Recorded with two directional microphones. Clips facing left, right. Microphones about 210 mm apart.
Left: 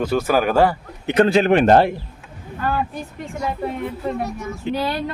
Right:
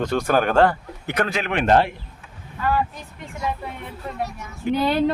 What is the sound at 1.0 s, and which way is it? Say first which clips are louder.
Speech: left 9 dB; 25° left (ahead or behind).